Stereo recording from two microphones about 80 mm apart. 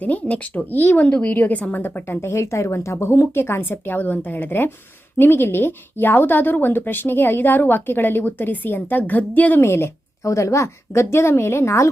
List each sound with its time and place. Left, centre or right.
0.0 s a woman's voice: centre
9.6 s a woman's voice: left